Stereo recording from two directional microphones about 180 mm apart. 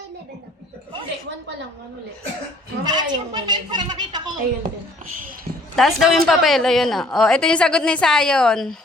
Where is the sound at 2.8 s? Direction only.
25° right (ahead or behind).